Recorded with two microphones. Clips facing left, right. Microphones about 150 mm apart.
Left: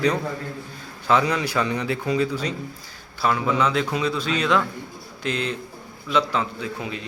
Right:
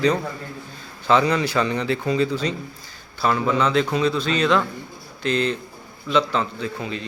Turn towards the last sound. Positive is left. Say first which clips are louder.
# right 2 dB
turn(degrees=10)  # may be behind; listen again after turning